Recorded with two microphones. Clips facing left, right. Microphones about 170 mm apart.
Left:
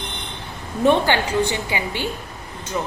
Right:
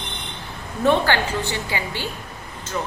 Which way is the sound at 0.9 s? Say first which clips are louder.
Left 1 dB; 15° left (ahead or behind).